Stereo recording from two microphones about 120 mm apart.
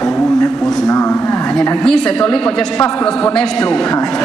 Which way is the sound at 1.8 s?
5° left (ahead or behind).